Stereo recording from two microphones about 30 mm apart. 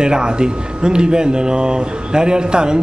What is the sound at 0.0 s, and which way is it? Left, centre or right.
A man's voice, right.